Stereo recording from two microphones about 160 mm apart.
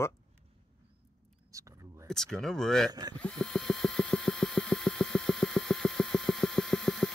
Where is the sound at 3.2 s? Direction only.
5° left (ahead or behind).